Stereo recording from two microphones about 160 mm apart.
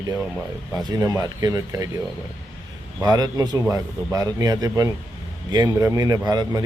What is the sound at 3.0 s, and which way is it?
Speech, 25° right (ahead or behind).